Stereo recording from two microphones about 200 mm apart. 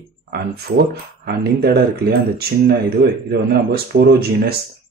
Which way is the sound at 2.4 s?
50° right (ahead or behind).